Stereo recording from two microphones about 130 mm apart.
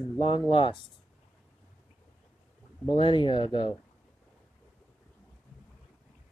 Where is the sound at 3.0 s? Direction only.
40° left (ahead or behind).